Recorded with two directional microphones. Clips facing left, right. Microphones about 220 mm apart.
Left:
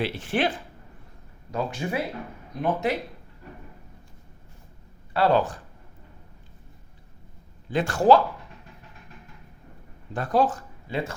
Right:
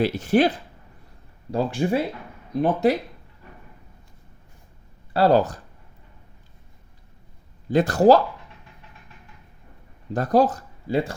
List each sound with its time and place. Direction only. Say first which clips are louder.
0.0 s speech: right 7 dB; 40° right (ahead or behind)
5.1 s speech: right 4 dB; 35° right (ahead or behind)
7.7 s speech: right 4 dB; 40° right (ahead or behind)
10.1 s speech: right 4 dB; 40° right (ahead or behind)